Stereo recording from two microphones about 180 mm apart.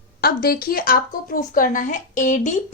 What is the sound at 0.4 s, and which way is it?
A woman's voice, 55° left (ahead or behind).